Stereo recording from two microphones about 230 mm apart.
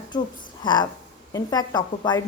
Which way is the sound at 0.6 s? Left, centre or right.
Centre.